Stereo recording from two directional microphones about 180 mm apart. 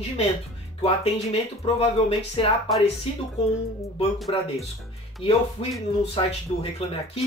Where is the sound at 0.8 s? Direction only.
35° left (ahead or behind).